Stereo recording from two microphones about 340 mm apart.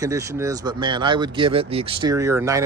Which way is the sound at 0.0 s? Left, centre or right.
Centre.